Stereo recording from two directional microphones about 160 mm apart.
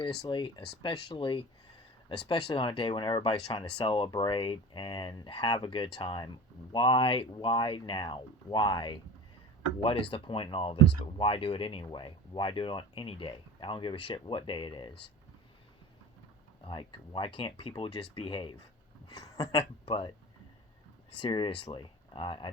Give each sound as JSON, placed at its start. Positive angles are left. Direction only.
{"t": 0.2, "sound": "speech", "side_deg": 30}
{"t": 16.6, "sound": "speech", "side_deg": 30}
{"t": 19.0, "sound": "a sound", "side_deg": 20}
{"t": 19.5, "sound": "speech", "side_deg": 30}
{"t": 21.2, "sound": "speech", "side_deg": 30}